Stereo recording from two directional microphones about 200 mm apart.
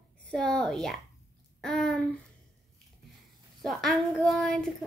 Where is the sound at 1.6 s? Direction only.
Centre (ahead or behind).